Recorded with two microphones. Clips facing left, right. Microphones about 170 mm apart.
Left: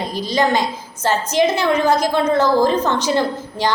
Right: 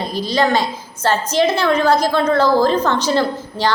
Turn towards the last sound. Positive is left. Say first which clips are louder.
# right 1 dB
turn(degrees=15)  # may be behind; listen again after turning